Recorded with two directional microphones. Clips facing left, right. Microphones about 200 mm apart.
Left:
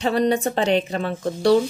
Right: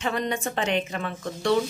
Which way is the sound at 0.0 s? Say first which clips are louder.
Left 8 dB; 35° left (ahead or behind).